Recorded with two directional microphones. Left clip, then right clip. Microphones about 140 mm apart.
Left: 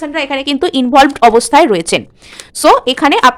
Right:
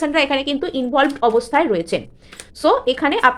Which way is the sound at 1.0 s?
70° left (ahead or behind).